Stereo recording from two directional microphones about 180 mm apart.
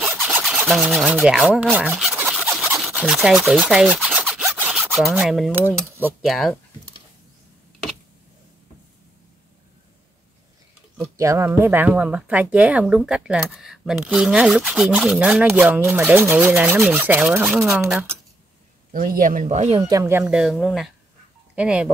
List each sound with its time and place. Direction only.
0.0 s rub: 5° right (ahead or behind)
5.2 s speech: centre (ahead or behind)
11.0 s a woman's voice: 15° right (ahead or behind)
18.9 s speech: 50° right (ahead or behind)
19.8 s speech: 15° right (ahead or behind)